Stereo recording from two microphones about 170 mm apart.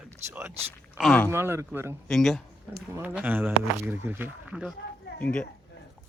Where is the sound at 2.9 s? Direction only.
10° right (ahead or behind).